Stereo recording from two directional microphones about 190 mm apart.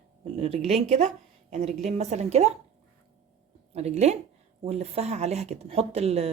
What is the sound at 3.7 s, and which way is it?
Speech, 35° right (ahead or behind).